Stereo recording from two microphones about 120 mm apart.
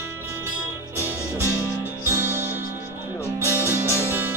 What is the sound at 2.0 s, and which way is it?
Music, 20° right (ahead or behind).